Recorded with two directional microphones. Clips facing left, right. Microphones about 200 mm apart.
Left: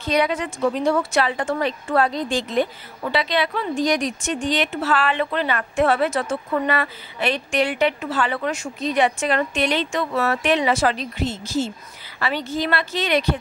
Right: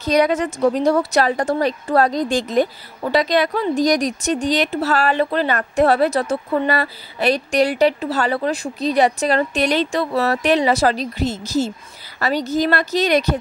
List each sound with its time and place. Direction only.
0.0 s speech: 40° right (ahead or behind)